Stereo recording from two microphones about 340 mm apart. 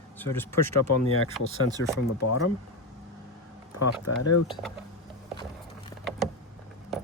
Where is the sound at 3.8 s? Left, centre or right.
Left.